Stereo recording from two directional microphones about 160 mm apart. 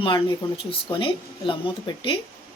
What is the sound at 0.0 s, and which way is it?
Speech, 30° left (ahead or behind).